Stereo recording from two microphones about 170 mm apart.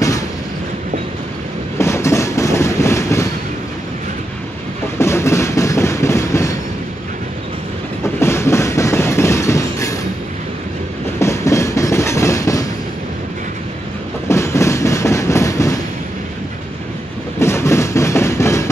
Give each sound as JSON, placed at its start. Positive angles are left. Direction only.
{"t": 1.8, "sound": "train", "side_deg": 15}
{"t": 4.9, "sound": "train", "side_deg": 15}
{"t": 8.2, "sound": "train", "side_deg": 15}
{"t": 11.1, "sound": "train", "side_deg": 15}
{"t": 14.3, "sound": "train", "side_deg": 15}
{"t": 17.4, "sound": "a sound", "side_deg": 15}